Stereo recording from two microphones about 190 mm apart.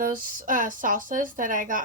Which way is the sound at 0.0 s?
45° right (ahead or behind).